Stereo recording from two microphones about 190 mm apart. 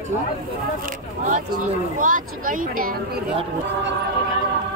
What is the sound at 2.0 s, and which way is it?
Speech, 45° right (ahead or behind).